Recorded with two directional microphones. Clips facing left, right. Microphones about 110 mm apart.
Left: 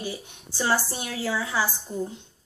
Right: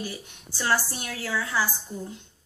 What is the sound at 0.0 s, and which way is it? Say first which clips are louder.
A woman's voice: left 2 dB; 20° left (ahead or behind).